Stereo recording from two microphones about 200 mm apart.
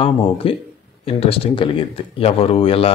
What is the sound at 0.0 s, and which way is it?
Speech, 25° left (ahead or behind).